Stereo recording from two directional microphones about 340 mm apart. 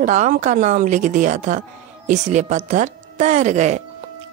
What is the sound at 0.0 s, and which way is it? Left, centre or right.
Speech, right.